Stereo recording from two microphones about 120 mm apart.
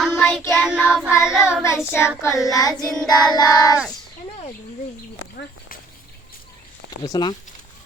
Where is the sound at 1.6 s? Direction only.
20° left (ahead or behind).